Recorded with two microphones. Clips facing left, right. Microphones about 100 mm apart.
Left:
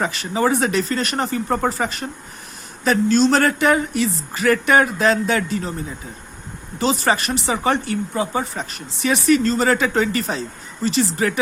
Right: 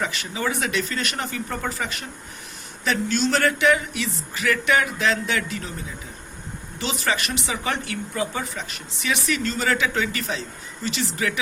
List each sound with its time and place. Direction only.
0.0 s speech: 40° left (ahead or behind)
6.7 s speech: 35° left (ahead or behind)